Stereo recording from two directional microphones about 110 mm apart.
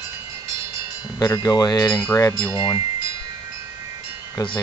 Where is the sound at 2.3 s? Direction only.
40° left (ahead or behind).